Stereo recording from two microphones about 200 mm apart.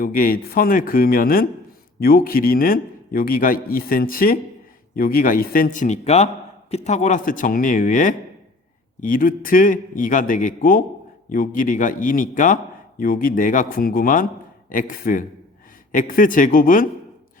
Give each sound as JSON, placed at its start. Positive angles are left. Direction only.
{"t": 0.0, "sound": "a man's voice", "side_deg": 45}